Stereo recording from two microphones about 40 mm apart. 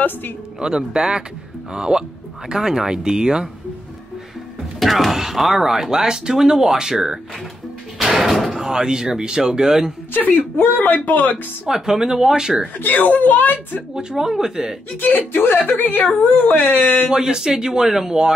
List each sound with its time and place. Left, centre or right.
0.6 s speech: centre
4.7 s speech: centre
8.0 s door: centre
8.6 s speech: centre
10.1 s speech: left
11.6 s speech: centre
12.7 s speech: left
13.9 s speech: centre
15.0 s speech: left
17.1 s speech: centre